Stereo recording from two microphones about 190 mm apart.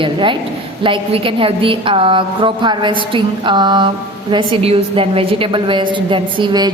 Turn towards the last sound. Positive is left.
turn(degrees=-20)  # may be behind; listen again after turning